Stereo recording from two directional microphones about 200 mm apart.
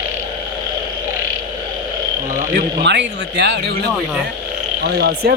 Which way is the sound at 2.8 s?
60° right (ahead or behind).